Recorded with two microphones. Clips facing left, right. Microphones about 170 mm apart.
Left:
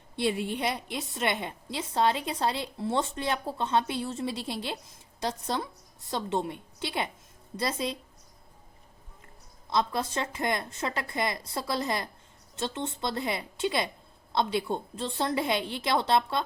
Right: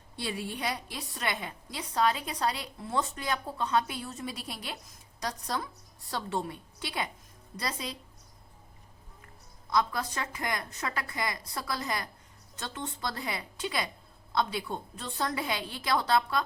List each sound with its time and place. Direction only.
0.2 s a woman's voice: 25° left (ahead or behind)
9.6 s a woman's voice: 25° left (ahead or behind)